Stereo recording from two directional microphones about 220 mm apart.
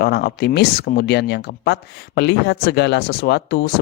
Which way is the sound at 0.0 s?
45° left (ahead or behind).